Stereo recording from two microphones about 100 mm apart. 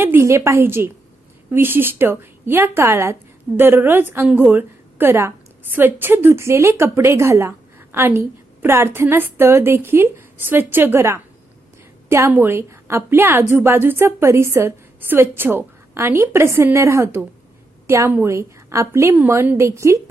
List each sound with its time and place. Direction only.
0.0 s a woman's voice: 25° right (ahead or behind)